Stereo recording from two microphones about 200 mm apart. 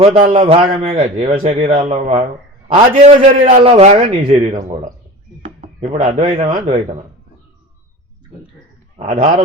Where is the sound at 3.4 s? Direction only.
40° right (ahead or behind).